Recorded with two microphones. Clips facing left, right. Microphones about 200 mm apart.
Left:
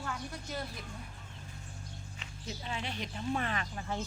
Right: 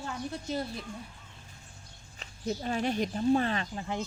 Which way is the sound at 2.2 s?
45° right (ahead or behind).